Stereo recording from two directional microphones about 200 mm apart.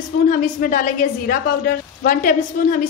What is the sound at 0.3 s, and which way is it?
A woman's voice, 40° left (ahead or behind).